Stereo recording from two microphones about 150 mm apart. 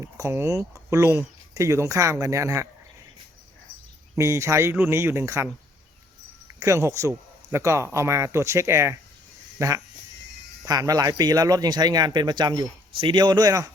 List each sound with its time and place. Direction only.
0.0 s speech: 20° right (ahead or behind)
4.2 s speech: 20° right (ahead or behind)
6.6 s speech: 20° right (ahead or behind)